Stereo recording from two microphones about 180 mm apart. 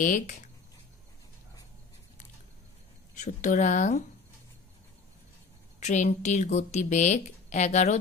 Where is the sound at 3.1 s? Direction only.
40° left (ahead or behind).